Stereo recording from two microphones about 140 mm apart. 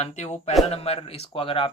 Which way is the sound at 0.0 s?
55° left (ahead or behind).